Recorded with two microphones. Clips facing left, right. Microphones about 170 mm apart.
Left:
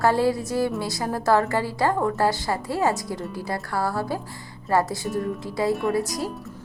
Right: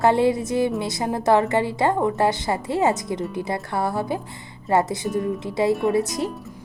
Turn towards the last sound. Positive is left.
turn(degrees=-20)  # may be behind; listen again after turning